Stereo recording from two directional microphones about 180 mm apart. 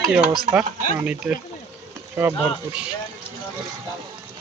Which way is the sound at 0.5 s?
10° right (ahead or behind).